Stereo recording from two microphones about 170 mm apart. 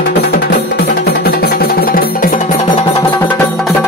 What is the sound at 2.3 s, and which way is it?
Music, 40° left (ahead or behind).